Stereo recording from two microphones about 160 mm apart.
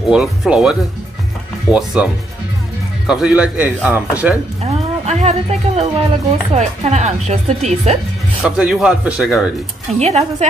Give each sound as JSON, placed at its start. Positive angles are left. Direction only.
{"t": 0.1, "sound": "speech", "side_deg": -5}
{"t": 3.1, "sound": "speech", "side_deg": -5}
{"t": 4.6, "sound": "speech", "side_deg": -45}
{"t": 8.4, "sound": "speech", "side_deg": -5}
{"t": 9.9, "sound": "speech", "side_deg": -40}